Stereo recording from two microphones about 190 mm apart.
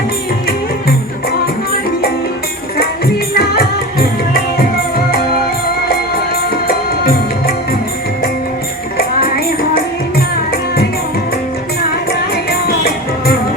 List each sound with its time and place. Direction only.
3.3 s music: 55° left (ahead or behind)
6.7 s music: 55° left (ahead or behind)
9.0 s music: 50° left (ahead or behind)
12.5 s music: 55° left (ahead or behind)